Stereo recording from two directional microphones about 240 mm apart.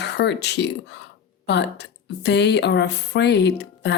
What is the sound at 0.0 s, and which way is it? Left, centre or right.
A woman's voice, left.